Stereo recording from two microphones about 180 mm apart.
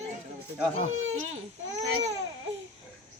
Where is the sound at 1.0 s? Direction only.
90° right.